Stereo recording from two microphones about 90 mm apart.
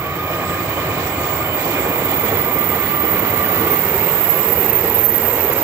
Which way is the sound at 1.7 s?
25° right (ahead or behind).